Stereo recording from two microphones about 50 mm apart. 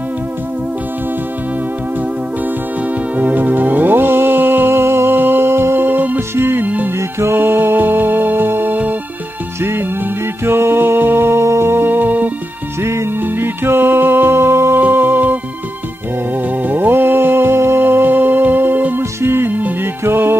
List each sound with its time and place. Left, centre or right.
3.2 s music: right
6.3 s music: right
6.6 s music: right
7.0 s music: right
7.3 s music: right
9.6 s music: right
11.4 s music: right
14.8 s music: right
16.6 s music: right
19.2 s music: right